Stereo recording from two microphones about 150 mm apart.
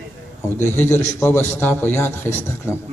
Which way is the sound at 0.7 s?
15° left (ahead or behind).